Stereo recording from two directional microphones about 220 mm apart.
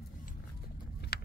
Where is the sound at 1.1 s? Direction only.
45° left (ahead or behind).